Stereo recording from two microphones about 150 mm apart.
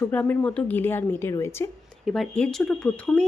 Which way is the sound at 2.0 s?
Centre (ahead or behind).